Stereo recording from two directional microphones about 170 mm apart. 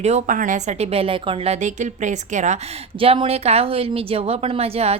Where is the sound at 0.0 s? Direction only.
40° right (ahead or behind).